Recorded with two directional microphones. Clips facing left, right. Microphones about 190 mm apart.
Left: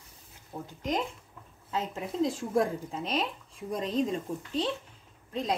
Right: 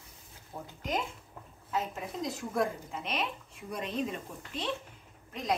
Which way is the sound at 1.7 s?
30° left (ahead or behind).